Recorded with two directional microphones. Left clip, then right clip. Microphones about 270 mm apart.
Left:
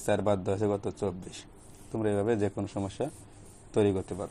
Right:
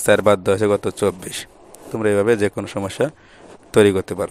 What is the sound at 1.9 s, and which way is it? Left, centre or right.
Speech, right.